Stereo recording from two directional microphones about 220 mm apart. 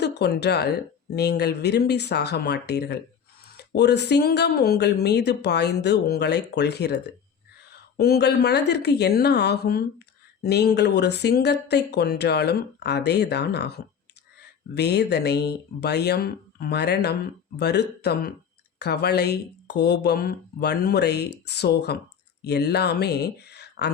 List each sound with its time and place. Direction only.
0.0 s speech: 50° left (ahead or behind)